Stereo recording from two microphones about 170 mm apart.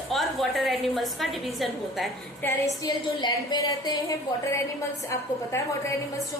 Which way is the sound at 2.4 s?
15° left (ahead or behind).